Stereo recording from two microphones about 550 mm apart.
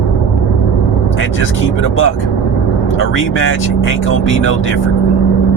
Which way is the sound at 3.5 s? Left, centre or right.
Left.